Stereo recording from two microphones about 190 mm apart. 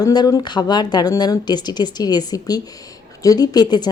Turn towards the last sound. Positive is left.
turn(degrees=20)  # may be behind; listen again after turning